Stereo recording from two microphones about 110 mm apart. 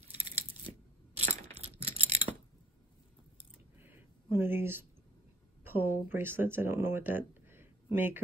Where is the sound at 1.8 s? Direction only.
70° right (ahead or behind).